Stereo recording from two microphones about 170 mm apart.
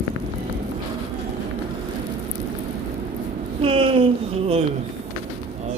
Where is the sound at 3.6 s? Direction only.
30° right (ahead or behind).